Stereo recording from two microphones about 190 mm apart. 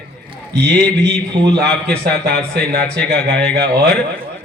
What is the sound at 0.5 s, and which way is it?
Speech, 60° right (ahead or behind).